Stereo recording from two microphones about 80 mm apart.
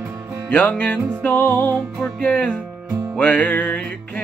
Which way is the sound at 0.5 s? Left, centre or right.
Centre.